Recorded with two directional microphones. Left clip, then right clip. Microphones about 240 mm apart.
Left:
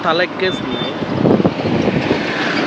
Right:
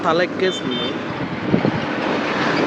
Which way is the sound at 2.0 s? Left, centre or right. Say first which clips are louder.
Left 3 dB; left.